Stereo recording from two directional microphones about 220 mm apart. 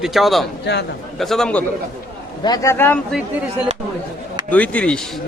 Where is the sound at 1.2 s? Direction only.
Centre (ahead or behind).